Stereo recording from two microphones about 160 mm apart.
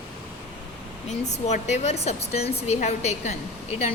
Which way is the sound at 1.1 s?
45° left (ahead or behind).